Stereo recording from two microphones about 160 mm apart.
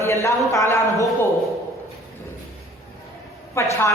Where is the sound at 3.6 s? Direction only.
15° left (ahead or behind).